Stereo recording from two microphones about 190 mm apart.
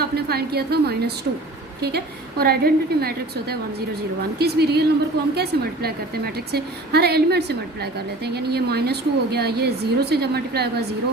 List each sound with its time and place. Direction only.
0.0 s a woman's voice: 55° right (ahead or behind)
2.4 s a woman's voice: 55° right (ahead or behind)